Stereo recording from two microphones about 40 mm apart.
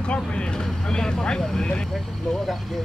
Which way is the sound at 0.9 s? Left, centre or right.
Centre.